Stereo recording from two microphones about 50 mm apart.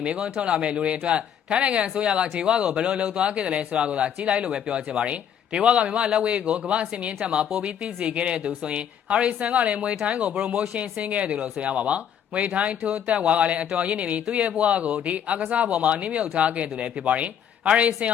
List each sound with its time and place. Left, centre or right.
0.0 s speech: right